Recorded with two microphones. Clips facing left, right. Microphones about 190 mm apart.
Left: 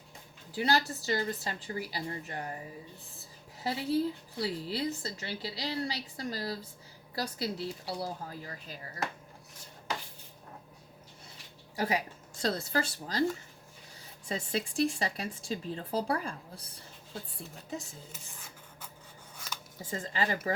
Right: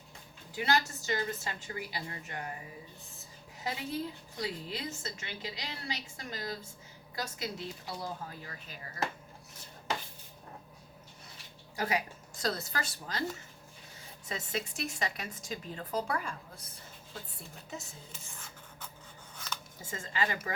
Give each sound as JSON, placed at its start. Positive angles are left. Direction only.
{"t": 0.5, "sound": "a woman's voice", "side_deg": 35}
{"t": 3.6, "sound": "a woman's voice", "side_deg": 35}
{"t": 11.8, "sound": "a woman's voice", "side_deg": 30}
{"t": 14.3, "sound": "a woman's voice", "side_deg": 30}
{"t": 19.9, "sound": "a woman's voice", "side_deg": 35}